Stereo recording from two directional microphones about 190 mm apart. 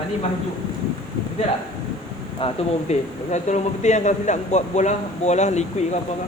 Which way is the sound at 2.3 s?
30° left (ahead or behind).